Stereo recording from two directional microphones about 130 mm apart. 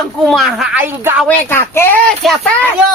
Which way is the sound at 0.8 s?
15° right (ahead or behind).